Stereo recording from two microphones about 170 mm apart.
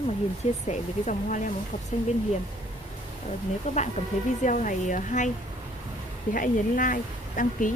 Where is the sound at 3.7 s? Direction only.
45° left (ahead or behind).